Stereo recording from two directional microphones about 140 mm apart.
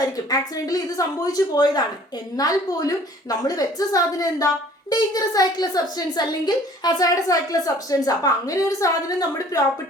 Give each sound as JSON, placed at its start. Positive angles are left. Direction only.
{"t": 0.3, "sound": "a woman's voice", "side_deg": 25}